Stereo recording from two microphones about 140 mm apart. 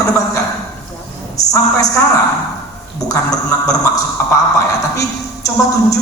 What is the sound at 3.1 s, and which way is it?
Speech, 25° left (ahead or behind).